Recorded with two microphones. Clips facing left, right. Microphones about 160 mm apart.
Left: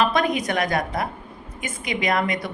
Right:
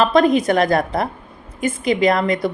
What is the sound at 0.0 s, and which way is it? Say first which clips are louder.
A woman's voice: right 7 dB; 30° right (ahead or behind).